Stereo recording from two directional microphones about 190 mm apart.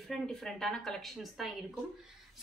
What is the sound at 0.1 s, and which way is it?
A woman's voice, centre (ahead or behind).